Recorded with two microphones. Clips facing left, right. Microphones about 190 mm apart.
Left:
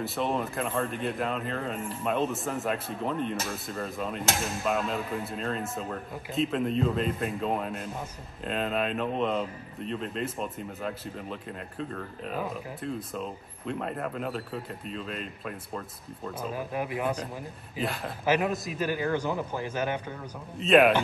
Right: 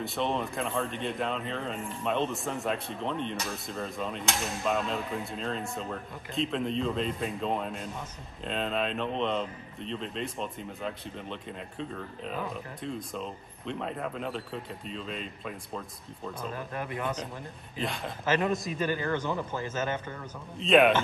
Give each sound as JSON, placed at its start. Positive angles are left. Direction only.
{"t": 0.0, "sound": "a man's voice", "side_deg": 0}